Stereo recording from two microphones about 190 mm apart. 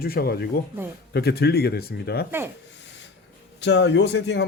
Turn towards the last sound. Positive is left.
turn(degrees=65)  # may be behind; listen again after turning